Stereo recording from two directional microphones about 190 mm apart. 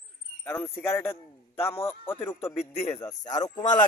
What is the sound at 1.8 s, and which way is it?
Speech, 25° left (ahead or behind).